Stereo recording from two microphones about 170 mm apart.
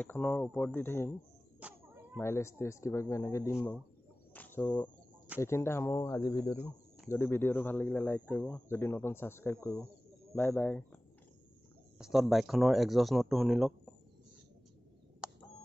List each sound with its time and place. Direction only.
0.0 s speech: 10° left (ahead or behind)
1.6 s a sound: 10° right (ahead or behind)
2.1 s speech: 15° left (ahead or behind)
4.3 s a sound: 10° left (ahead or behind)
5.4 s speech: 15° left (ahead or behind)
12.0 s speech: centre (ahead or behind)